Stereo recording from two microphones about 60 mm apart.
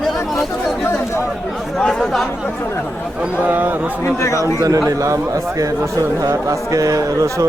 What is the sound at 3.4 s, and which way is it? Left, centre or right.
Speech, right.